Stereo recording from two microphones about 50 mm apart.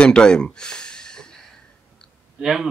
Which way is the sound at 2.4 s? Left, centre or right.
Centre.